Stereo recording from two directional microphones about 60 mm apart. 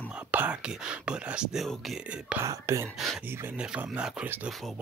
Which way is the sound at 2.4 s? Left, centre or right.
Right.